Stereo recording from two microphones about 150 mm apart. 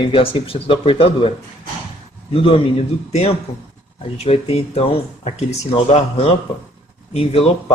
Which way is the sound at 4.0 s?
40° left (ahead or behind).